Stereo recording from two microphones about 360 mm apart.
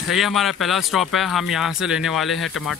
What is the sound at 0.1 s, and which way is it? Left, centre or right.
Speech, centre.